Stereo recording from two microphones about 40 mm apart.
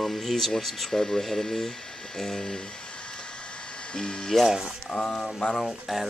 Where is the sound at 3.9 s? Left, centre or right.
Centre.